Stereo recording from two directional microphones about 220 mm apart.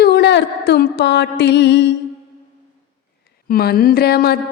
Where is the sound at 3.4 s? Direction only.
45° left (ahead or behind).